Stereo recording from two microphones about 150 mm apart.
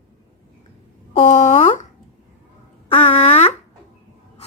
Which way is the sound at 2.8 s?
40° left (ahead or behind).